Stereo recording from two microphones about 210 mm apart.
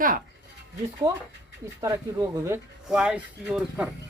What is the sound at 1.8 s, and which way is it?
Speech, 15° right (ahead or behind).